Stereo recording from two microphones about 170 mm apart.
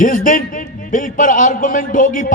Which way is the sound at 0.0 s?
50° left (ahead or behind).